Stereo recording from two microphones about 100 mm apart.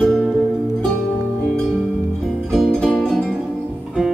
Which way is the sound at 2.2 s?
Centre (ahead or behind).